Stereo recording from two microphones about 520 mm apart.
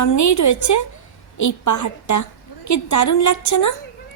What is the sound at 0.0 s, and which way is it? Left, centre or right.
A woman's voice, left.